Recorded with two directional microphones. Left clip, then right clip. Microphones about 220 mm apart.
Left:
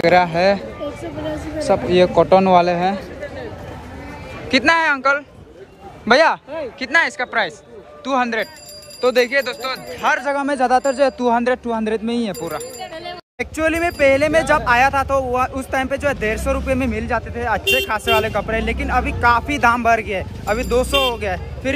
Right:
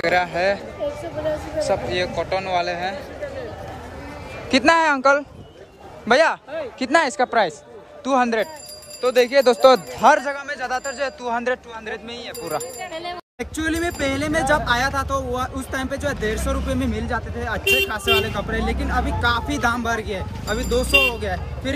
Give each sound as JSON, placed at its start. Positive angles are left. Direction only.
{"t": 0.0, "sound": "speech", "side_deg": 0}
{"t": 4.5, "sound": "speech", "side_deg": -15}
{"t": 10.3, "sound": "speech", "side_deg": 0}
{"t": 12.9, "sound": "a sound", "side_deg": -40}
{"t": 13.4, "sound": "speech", "side_deg": -5}